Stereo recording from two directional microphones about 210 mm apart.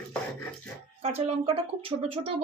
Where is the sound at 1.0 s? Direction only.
30° right (ahead or behind).